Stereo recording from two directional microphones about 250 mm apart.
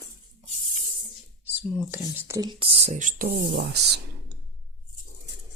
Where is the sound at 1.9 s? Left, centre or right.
Centre; by 3.3 s right.